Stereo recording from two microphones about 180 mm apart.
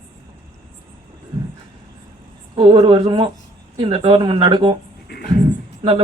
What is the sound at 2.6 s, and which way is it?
Speech, 25° right (ahead or behind).